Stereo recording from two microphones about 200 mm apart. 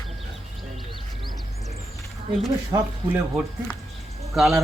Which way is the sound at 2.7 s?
15° right (ahead or behind).